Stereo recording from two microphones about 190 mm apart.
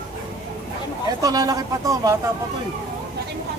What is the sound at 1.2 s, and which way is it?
Speech, 20° right (ahead or behind).